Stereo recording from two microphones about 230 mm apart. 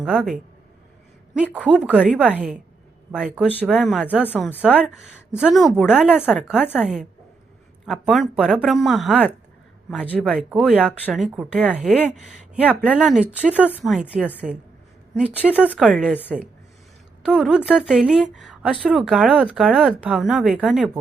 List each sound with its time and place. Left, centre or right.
0.0 s speech: centre
3.5 s a woman's voice: centre
17.2 s speech: centre